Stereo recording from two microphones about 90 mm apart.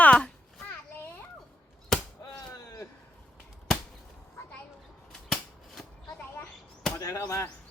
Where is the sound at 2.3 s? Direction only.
40° left (ahead or behind).